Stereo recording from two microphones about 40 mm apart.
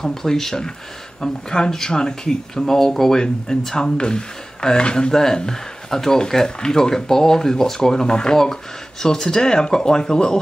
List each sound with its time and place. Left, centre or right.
0.0 s speech: centre